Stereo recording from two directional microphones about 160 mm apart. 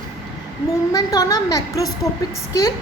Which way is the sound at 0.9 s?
20° left (ahead or behind).